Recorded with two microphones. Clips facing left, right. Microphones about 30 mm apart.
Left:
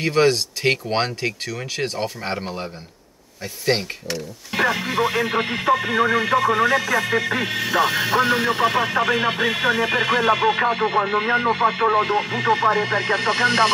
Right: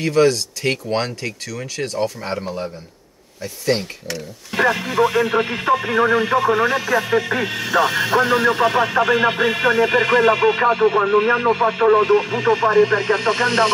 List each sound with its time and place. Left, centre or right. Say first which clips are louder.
0.0 s speech: right 2 dB; left; by 13.7 s centre